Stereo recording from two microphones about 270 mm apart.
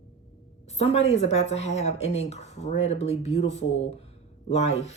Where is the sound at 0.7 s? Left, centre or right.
Left.